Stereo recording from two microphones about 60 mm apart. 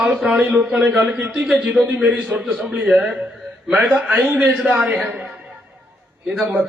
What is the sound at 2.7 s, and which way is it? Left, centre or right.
A man's voice, centre.